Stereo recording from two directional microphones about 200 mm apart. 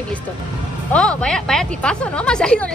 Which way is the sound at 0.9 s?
5° left (ahead or behind).